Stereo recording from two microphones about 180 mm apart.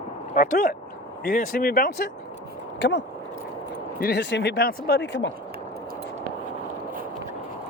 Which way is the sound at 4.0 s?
70° left (ahead or behind).